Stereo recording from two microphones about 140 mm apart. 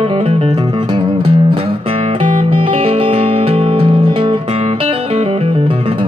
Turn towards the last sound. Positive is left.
turn(degrees=-40)  # may be behind; listen again after turning